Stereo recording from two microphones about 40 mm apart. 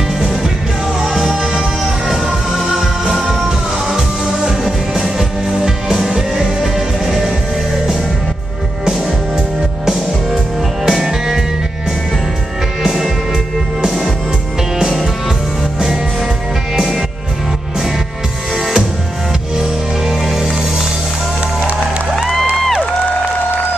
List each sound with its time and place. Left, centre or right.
1.0 s music: centre
6.3 s music: centre
10.9 s music: centre
14.8 s music: centre
19.6 s music: centre